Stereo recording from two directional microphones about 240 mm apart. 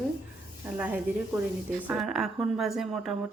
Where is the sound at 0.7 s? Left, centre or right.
Centre.